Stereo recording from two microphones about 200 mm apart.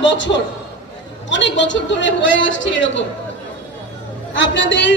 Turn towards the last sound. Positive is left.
turn(degrees=65)  # may be behind; listen again after turning